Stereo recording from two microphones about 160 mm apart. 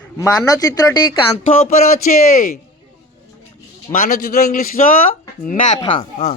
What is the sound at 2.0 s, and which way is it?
Speech, 60° left (ahead or behind).